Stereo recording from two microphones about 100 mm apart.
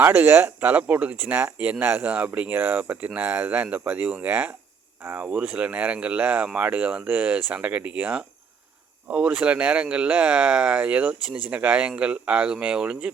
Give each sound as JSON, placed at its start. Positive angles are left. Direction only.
{"t": 0.0, "sound": "speech", "side_deg": -20}